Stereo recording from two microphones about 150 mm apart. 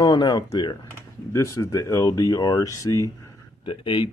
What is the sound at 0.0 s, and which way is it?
Speech, 25° left (ahead or behind).